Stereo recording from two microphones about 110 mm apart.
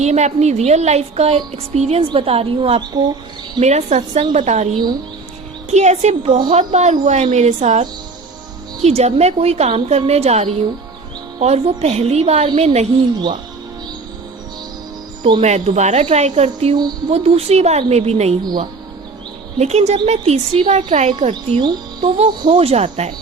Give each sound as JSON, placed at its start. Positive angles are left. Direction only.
{"t": 0.0, "sound": "a woman's voice", "side_deg": -90}
{"t": 3.6, "sound": "a woman's voice", "side_deg": -90}
{"t": 5.7, "sound": "a woman's voice", "side_deg": -90}
{"t": 6.2, "sound": "a woman's voice", "side_deg": -50}
{"t": 6.5, "sound": "a woman's voice", "side_deg": -90}
{"t": 8.8, "sound": "a woman's voice", "side_deg": -75}
{"t": 15.4, "sound": "a woman's voice", "side_deg": -85}
{"t": 18.4, "sound": "a woman's voice", "side_deg": -45}
{"t": 19.5, "sound": "speech", "side_deg": -80}
{"t": 22.0, "sound": "a woman's voice", "side_deg": -70}